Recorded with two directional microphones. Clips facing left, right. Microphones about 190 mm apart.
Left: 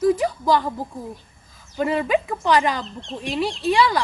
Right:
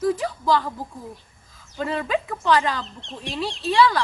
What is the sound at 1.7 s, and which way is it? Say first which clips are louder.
Speech: left 4 dB; 15° left (ahead or behind).